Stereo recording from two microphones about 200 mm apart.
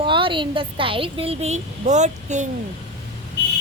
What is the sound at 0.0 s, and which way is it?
A woman's voice, 25° right (ahead or behind).